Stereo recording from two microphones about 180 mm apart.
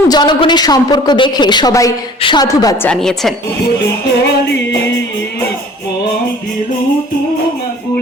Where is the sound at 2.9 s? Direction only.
Centre (ahead or behind).